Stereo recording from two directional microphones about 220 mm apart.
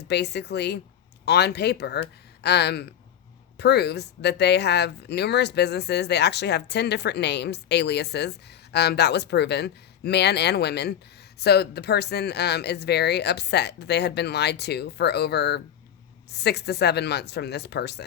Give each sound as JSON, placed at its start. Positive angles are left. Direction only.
{"t": 0.0, "sound": "speech", "side_deg": 50}